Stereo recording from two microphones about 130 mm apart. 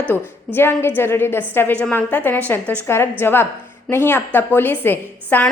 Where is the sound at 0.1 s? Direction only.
15° left (ahead or behind).